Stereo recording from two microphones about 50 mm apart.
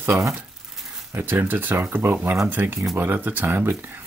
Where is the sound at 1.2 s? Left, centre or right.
Right.